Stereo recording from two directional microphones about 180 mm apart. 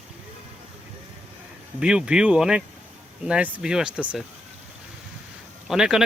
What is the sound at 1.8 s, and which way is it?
Speech, 5° right (ahead or behind).